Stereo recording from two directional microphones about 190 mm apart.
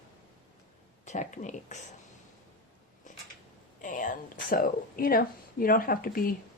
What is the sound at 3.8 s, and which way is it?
Speech, 45° left (ahead or behind).